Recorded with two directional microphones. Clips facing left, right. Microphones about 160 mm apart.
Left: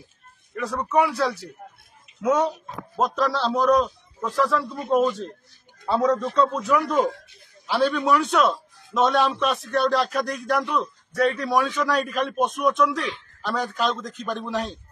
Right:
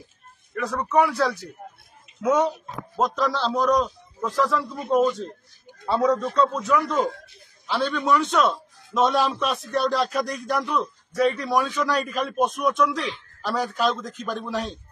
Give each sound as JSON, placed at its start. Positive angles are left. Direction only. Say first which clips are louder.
{"t": 0.6, "sound": "a man's voice", "louder": "right 1 dB", "side_deg": 5}
{"t": 6.7, "sound": "a man's voice", "louder": "left 1 dB", "side_deg": 10}